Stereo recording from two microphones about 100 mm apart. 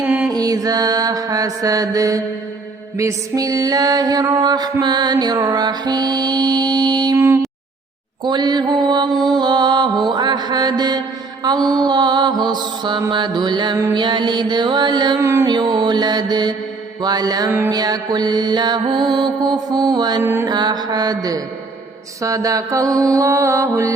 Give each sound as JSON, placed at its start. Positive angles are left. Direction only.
{"t": 0.0, "sound": "music", "side_deg": -10}
{"t": 0.3, "sound": "mantra", "side_deg": -35}
{"t": 3.0, "sound": "music", "side_deg": -35}
{"t": 8.2, "sound": "music", "side_deg": -45}
{"t": 15.2, "sound": "music", "side_deg": -25}
{"t": 15.4, "sound": "music", "side_deg": -45}
{"t": 20.2, "sound": "music", "side_deg": -25}
{"t": 20.5, "sound": "music", "side_deg": -45}